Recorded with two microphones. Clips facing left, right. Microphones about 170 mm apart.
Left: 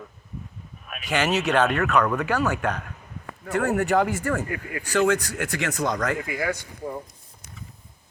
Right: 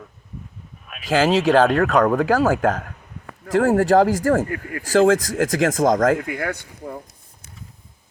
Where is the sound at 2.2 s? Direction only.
90° right.